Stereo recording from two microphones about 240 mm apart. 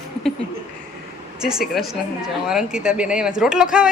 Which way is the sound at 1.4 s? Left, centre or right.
Centre.